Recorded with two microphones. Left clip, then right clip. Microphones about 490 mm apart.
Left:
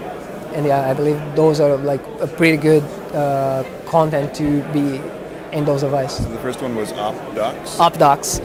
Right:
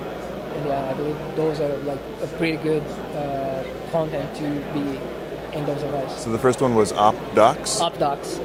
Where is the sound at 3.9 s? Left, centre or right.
Left.